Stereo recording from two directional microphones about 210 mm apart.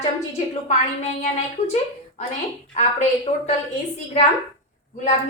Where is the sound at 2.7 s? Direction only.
35° left (ahead or behind).